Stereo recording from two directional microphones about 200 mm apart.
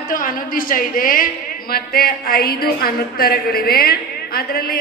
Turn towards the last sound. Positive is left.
turn(degrees=50)  # may be behind; listen again after turning